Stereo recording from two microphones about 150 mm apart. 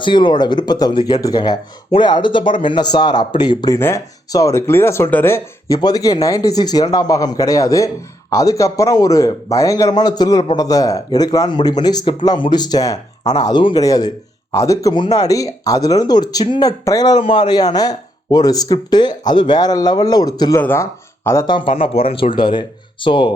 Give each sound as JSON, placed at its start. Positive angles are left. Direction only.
{"t": 0.0, "sound": "speech", "side_deg": 30}
{"t": 3.8, "sound": "speech", "side_deg": 15}
{"t": 20.6, "sound": "speech", "side_deg": 15}
{"t": 21.4, "sound": "speech", "side_deg": 35}